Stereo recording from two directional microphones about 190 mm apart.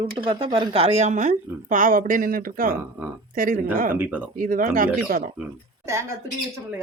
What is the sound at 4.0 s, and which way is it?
Speech, 10° right (ahead or behind).